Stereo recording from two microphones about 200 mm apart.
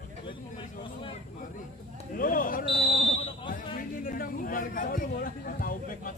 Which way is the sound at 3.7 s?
45° left (ahead or behind).